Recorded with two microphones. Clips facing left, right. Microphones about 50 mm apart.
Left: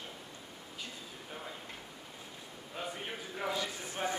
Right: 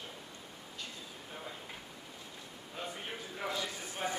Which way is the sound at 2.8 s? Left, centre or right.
Centre.